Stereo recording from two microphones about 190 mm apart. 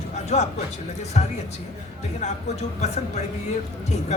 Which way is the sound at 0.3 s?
35° left (ahead or behind).